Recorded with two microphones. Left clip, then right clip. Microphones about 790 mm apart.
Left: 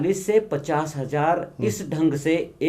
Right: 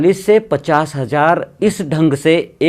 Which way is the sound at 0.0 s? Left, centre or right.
Right.